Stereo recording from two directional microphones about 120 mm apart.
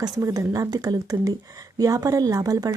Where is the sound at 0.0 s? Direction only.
25° right (ahead or behind).